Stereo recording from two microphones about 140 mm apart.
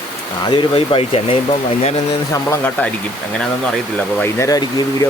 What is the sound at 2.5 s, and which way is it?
Speech, 10° left (ahead or behind).